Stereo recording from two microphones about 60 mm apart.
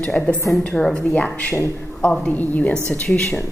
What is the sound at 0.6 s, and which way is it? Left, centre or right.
Speech, centre.